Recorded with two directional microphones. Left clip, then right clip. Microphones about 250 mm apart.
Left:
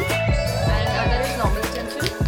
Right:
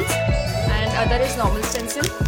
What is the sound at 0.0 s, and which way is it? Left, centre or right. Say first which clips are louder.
Music: even; centre.